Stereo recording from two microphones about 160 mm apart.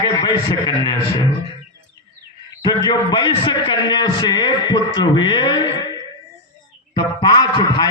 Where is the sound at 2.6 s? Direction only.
25° left (ahead or behind).